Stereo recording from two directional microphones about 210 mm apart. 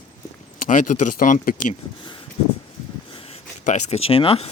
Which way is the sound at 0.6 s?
40° left (ahead or behind).